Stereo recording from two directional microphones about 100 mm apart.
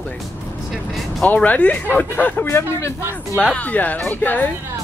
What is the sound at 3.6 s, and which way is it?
Speech, 15° left (ahead or behind).